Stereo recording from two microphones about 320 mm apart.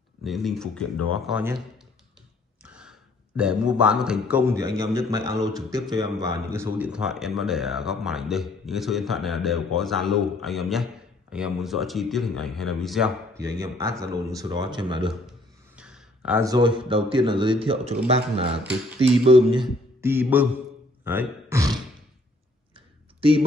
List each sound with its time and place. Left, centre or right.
0.2 s a man's voice: centre
2.6 s a man's voice: centre
15.0 s a sound: centre
16.3 s speech: centre
23.2 s speech: centre